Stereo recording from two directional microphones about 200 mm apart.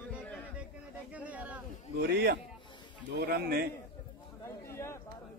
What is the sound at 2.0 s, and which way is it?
A man's voice, 55° right (ahead or behind).